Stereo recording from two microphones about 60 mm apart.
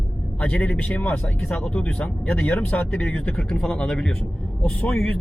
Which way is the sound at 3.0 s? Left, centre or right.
Centre.